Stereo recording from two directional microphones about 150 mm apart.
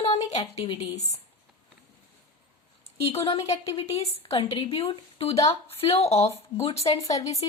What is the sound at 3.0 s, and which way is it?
A woman's voice, 40° left (ahead or behind).